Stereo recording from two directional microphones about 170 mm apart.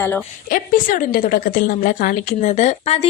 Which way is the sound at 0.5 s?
55° left (ahead or behind).